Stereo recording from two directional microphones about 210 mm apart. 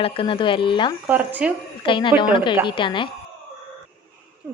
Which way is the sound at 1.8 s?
25° left (ahead or behind).